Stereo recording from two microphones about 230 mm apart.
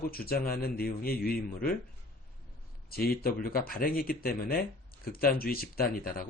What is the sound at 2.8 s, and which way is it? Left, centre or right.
Speech, left.